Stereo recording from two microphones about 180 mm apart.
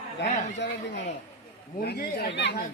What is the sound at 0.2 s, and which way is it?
Speech, 75° left (ahead or behind).